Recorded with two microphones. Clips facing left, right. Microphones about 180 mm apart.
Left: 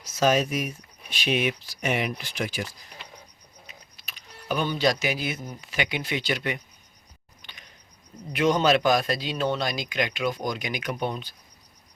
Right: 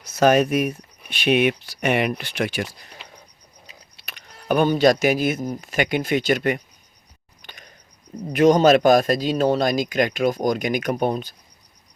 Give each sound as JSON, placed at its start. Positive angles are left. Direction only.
{"t": 0.0, "sound": "speech", "side_deg": -60}
{"t": 4.0, "sound": "speech", "side_deg": -60}
{"t": 7.4, "sound": "a sound", "side_deg": -45}
{"t": 8.3, "sound": "a man's voice", "side_deg": -45}